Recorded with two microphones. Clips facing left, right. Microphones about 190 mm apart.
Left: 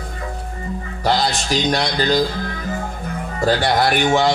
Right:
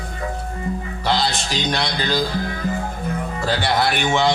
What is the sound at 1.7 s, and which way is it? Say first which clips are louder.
Speech: left 4 dB; 40° left (ahead or behind).